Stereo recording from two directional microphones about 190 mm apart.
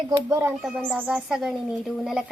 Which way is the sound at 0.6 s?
Centre (ahead or behind).